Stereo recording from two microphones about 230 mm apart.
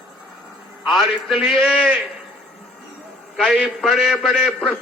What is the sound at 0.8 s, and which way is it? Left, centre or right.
A man's voice, centre.